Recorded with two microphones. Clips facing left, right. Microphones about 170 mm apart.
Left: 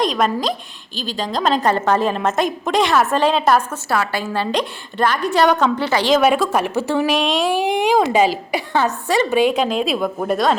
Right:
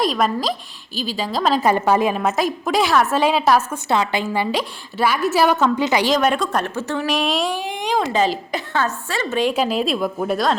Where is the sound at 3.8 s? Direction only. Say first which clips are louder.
Right 1 dB; 20° right (ahead or behind).